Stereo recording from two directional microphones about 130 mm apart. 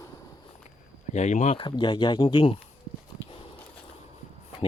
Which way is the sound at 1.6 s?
35° left (ahead or behind).